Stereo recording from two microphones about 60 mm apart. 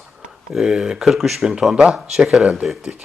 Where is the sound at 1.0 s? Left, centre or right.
Centre.